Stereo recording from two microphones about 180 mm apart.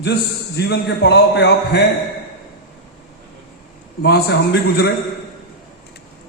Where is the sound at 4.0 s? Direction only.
65° left (ahead or behind).